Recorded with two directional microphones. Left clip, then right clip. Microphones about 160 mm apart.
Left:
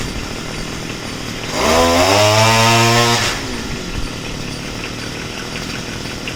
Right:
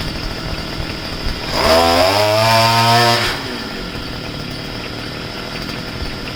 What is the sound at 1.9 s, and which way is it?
Chainsaw, 30° right (ahead or behind).